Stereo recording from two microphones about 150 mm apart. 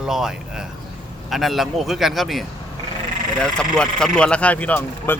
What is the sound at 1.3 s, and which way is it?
Speech, centre (ahead or behind).